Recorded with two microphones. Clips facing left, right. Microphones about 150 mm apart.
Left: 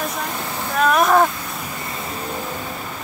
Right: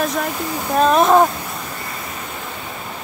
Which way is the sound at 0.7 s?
25° right (ahead or behind).